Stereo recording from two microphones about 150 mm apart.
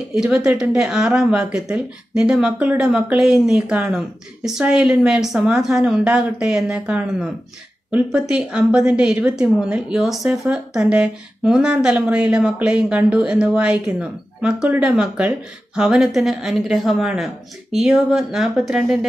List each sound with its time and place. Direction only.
0.1 s speech: 5° right (ahead or behind)